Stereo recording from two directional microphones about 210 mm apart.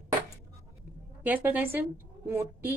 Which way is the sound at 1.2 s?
10° right (ahead or behind).